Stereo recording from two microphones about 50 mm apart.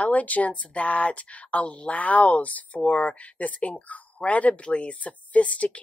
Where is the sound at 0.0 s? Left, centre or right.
Left.